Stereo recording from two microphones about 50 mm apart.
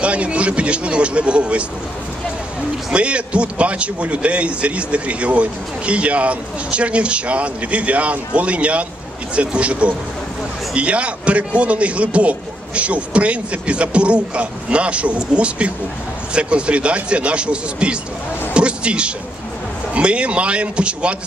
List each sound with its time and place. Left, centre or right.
0.0 s speech: right
2.9 s speech: right